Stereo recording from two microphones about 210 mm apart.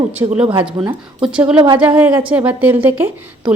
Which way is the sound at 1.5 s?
25° right (ahead or behind).